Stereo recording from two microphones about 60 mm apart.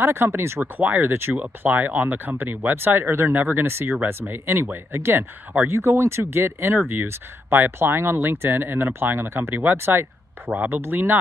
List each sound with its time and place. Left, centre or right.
0.0 s speech: right
0.7 s speech: right
3.3 s speech: right